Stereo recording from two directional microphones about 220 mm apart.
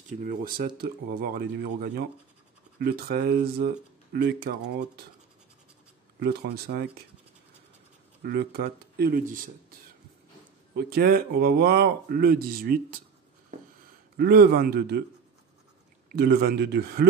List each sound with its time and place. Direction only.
0.1 s speech: 40° right (ahead or behind)
6.1 s speech: 45° right (ahead or behind)
8.2 s speech: 45° right (ahead or behind)
10.8 s speech: 45° right (ahead or behind)
14.1 s speech: 45° right (ahead or behind)
16.1 s speech: 45° right (ahead or behind)